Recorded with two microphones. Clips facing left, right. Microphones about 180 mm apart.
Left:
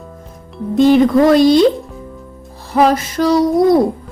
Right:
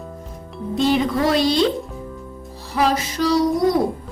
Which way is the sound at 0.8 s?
50° left (ahead or behind).